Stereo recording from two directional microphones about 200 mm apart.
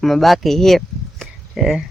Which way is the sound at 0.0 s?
Centre (ahead or behind).